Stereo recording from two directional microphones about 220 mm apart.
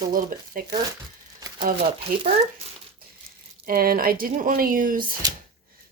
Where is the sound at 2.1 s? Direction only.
40° right (ahead or behind).